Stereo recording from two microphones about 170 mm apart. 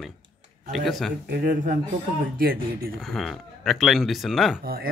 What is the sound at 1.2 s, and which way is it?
Speech, 60° right (ahead or behind).